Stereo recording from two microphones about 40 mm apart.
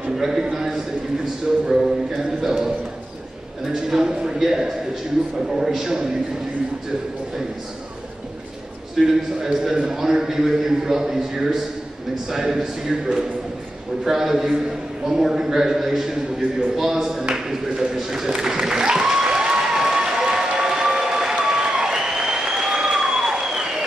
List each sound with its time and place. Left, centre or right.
0.1 s a man's voice: centre
9.0 s a man's voice: centre
14.0 s a man's voice: centre
17.5 s a sound: centre